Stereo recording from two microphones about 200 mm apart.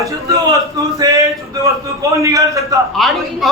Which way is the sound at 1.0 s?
20° right (ahead or behind).